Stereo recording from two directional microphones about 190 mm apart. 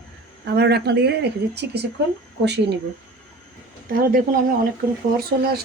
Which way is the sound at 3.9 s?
50° right (ahead or behind).